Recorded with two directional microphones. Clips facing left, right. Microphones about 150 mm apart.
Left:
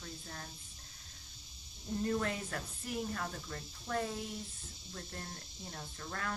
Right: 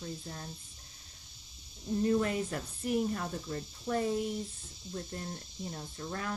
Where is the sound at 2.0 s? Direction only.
15° right (ahead or behind).